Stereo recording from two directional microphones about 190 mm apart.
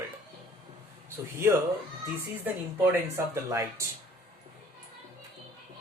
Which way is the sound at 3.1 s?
15° right (ahead or behind).